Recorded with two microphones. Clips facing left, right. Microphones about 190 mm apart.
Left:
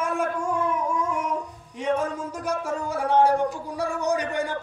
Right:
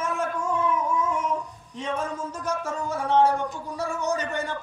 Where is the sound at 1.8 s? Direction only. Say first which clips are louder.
Left 4 dB; 15° left (ahead or behind).